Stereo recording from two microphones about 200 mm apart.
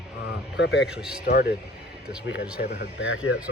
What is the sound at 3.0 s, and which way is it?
Speech, 85° left.